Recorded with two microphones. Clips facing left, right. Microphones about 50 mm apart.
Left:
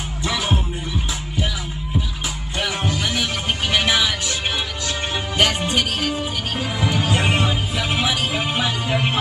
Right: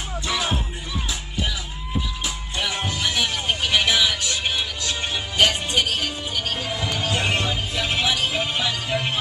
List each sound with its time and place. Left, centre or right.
0.2 s music: left
2.9 s music: left